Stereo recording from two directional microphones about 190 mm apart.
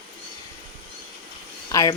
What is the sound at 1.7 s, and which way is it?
Speech, 15° left (ahead or behind).